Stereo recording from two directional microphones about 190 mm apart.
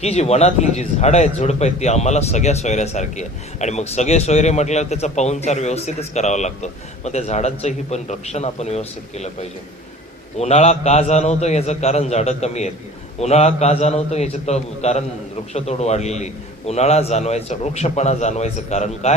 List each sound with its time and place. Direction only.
0.0 s a man's voice: 35° left (ahead or behind)